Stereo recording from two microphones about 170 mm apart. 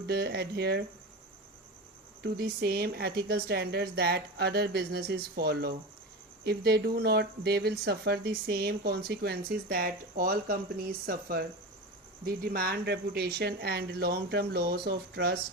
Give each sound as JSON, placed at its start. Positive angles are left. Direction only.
{"t": 0.1, "sound": "speech", "side_deg": -70}
{"t": 2.2, "sound": "speech", "side_deg": -70}